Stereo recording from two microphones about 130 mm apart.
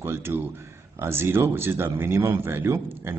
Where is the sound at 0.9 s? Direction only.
20° right (ahead or behind).